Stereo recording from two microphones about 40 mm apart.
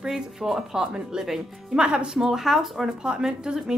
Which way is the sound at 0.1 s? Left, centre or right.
Centre.